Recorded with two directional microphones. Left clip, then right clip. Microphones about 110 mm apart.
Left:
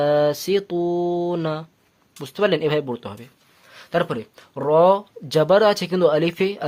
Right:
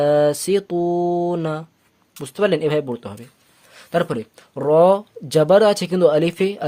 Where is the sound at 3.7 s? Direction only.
45° right (ahead or behind).